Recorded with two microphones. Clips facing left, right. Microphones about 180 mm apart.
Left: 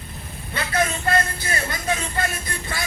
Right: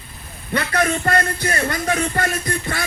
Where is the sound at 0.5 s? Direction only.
60° right (ahead or behind).